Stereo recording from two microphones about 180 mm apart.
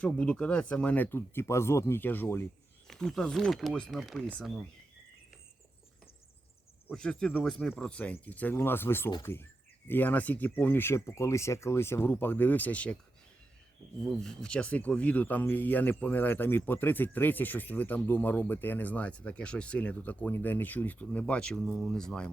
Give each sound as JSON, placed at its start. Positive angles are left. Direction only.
{"t": 0.0, "sound": "speech", "side_deg": 5}
{"t": 2.8, "sound": "speech", "side_deg": 0}
{"t": 6.8, "sound": "speech", "side_deg": 5}
{"t": 14.0, "sound": "speech", "side_deg": 5}